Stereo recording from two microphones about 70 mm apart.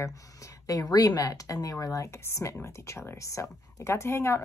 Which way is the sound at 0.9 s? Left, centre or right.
Left.